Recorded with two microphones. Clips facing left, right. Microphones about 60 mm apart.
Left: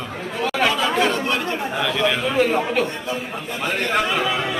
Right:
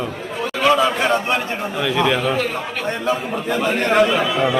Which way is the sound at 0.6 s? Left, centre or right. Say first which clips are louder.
Right 5 dB; centre.